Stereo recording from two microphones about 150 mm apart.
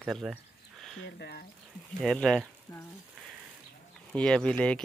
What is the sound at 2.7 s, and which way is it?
Frying, 25° left (ahead or behind).